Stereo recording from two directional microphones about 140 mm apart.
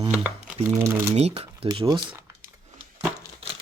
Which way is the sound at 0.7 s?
20° right (ahead or behind).